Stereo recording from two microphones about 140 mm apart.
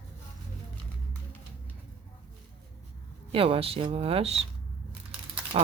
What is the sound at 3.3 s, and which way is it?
Speech, 40° right (ahead or behind).